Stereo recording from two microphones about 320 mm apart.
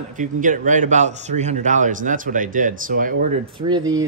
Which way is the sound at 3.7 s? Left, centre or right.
Centre.